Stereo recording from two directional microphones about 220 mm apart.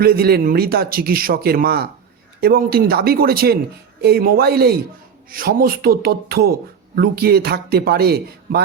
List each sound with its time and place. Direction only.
0.0 s speech: 45° right (ahead or behind)